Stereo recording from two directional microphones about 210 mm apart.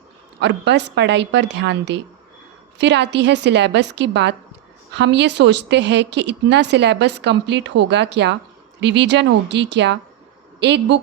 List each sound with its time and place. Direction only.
0.3 s a woman's voice: 55° right (ahead or behind)